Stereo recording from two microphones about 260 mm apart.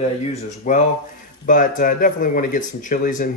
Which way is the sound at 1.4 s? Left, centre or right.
Left.